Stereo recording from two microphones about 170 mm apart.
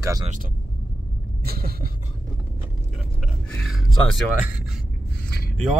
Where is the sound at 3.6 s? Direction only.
Centre (ahead or behind).